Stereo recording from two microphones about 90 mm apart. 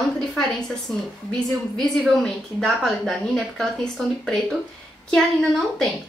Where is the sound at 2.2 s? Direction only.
5° left (ahead or behind).